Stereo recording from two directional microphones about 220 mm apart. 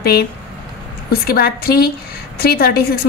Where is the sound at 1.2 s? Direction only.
45° left (ahead or behind).